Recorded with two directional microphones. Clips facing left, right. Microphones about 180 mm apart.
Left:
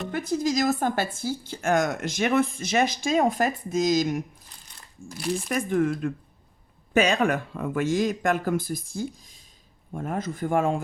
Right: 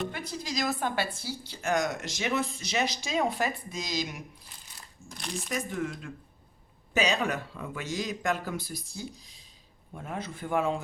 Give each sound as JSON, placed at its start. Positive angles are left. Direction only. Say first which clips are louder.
{"t": 0.1, "sound": "a woman's voice", "louder": "left 11 dB", "side_deg": 45}
{"t": 5.0, "sound": "speech", "louder": "left 9 dB", "side_deg": 5}
{"t": 5.5, "sound": "a woman's voice", "louder": "left 8 dB", "side_deg": 55}